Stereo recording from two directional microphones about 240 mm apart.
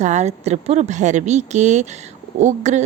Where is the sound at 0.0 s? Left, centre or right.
Right.